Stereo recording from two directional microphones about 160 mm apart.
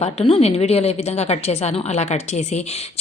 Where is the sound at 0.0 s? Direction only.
40° left (ahead or behind).